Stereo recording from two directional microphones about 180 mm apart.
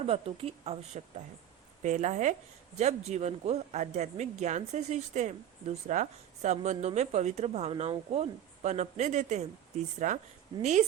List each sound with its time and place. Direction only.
0.0 s speech: 35° right (ahead or behind)